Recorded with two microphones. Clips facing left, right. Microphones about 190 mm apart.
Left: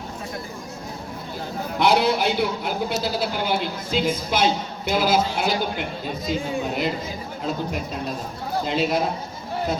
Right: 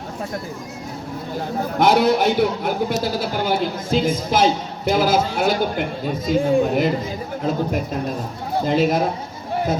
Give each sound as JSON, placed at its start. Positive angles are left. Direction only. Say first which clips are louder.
{"t": 1.8, "sound": "a woman's voice", "louder": "right 4 dB", "side_deg": -50}